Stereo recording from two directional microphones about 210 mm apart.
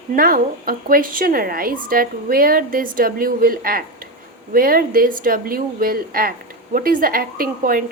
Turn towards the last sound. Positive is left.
turn(degrees=-45)  # may be behind; listen again after turning